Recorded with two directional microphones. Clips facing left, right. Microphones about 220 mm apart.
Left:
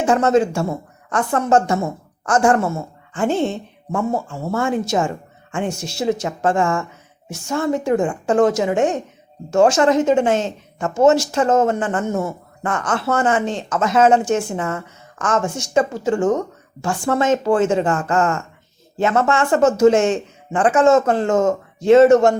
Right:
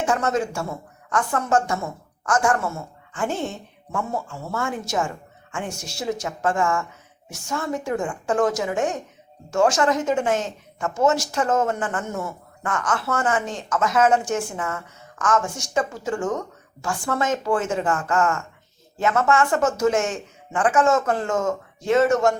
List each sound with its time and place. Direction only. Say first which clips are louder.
0.0 s speech: left 7 dB; 25° left (ahead or behind)